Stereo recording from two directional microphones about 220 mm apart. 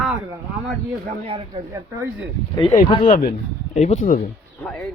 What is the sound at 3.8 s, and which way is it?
Speech, 35° left (ahead or behind).